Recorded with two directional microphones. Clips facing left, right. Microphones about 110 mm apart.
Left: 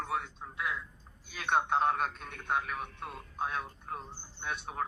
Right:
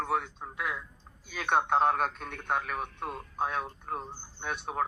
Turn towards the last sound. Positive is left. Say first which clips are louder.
# right 4 dB
turn(degrees=-50)  # may be behind; listen again after turning